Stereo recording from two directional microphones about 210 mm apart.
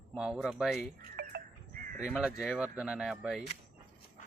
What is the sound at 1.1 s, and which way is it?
Music, 45° right (ahead or behind).